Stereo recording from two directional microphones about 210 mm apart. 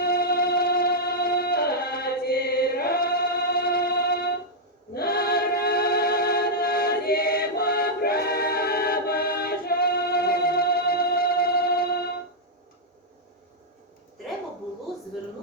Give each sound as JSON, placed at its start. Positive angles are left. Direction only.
{"t": 0.0, "sound": "music", "side_deg": 45}